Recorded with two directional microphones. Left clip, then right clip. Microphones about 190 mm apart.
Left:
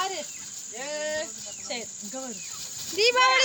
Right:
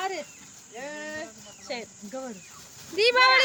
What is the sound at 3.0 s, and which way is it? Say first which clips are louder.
Speech: right 1 dB; 10° right (ahead or behind).